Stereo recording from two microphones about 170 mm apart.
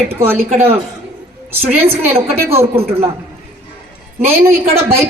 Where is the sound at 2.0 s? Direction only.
15° right (ahead or behind).